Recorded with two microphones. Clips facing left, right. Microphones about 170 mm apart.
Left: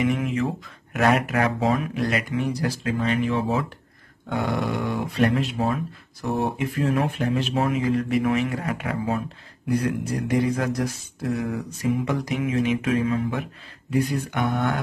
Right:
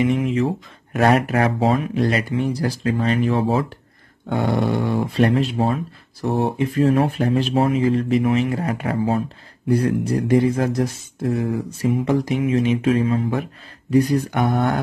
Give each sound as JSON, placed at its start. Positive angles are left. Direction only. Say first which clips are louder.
{"t": 0.0, "sound": "speech", "louder": "right 4 dB", "side_deg": -30}